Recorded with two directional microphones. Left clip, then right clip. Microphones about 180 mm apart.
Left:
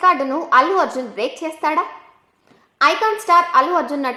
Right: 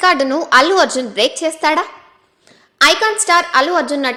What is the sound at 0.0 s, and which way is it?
A woman's voice, 30° right (ahead or behind).